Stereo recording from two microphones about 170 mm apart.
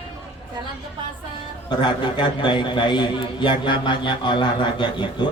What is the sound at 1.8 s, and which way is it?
A man's voice, 30° left (ahead or behind).